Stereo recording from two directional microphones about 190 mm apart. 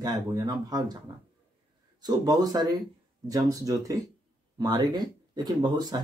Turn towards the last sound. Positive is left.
turn(degrees=-25)  # may be behind; listen again after turning